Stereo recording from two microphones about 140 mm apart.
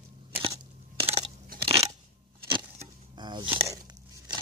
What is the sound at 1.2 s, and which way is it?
Crunch, 40° right (ahead or behind).